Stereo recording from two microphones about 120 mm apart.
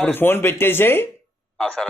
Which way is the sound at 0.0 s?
15° left (ahead or behind).